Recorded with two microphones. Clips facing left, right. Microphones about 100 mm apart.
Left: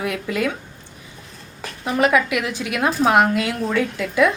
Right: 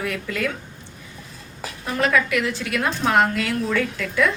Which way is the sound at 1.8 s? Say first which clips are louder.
Left 3 dB; 15° left (ahead or behind).